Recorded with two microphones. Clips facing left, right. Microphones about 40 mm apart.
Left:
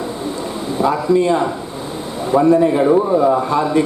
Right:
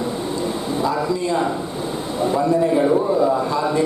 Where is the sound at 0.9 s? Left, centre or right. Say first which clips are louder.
Left 8 dB; left.